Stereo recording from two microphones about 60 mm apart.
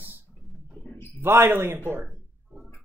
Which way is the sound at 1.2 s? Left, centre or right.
Right.